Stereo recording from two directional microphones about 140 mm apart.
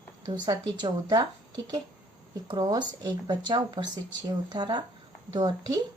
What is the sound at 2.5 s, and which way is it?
Speech, 30° right (ahead or behind).